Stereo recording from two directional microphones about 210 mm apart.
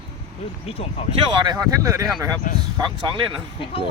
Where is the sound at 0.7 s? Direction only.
30° left (ahead or behind).